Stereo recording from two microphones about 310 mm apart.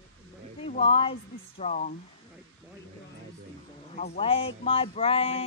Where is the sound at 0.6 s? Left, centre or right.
Centre.